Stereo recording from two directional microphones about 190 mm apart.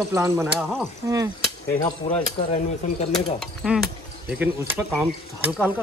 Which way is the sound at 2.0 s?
30° left (ahead or behind).